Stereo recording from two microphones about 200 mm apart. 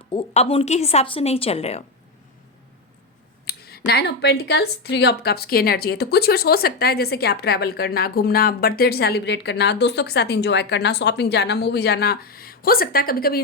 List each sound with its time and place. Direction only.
0.1 s a woman's voice: 30° left (ahead or behind)
3.4 s speech: 50° left (ahead or behind)